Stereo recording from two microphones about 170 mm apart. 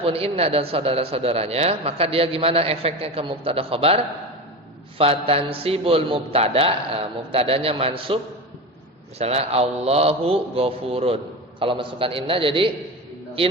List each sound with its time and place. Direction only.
0.0 s a man's voice: 35° right (ahead or behind)